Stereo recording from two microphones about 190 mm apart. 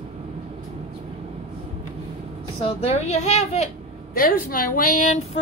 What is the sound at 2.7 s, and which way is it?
A woman's voice, 30° left (ahead or behind).